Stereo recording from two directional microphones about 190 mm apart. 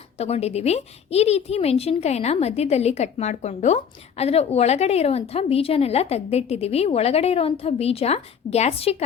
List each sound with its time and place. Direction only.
0.2 s a woman's voice: 35° left (ahead or behind)